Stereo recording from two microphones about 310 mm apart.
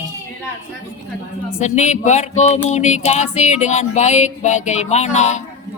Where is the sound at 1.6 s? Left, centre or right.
Left.